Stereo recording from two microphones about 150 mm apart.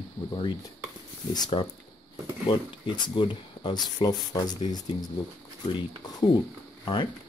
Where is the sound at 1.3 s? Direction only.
30° left (ahead or behind).